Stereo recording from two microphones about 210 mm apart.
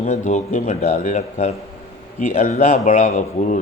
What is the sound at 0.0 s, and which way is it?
A man's voice, 35° left (ahead or behind).